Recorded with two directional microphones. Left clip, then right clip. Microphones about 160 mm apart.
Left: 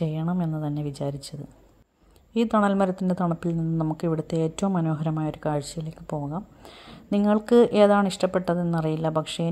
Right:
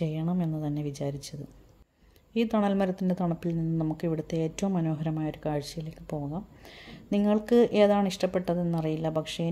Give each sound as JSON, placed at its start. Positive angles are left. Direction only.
{"t": 0.0, "sound": "speech", "side_deg": 10}
{"t": 2.3, "sound": "speech", "side_deg": 15}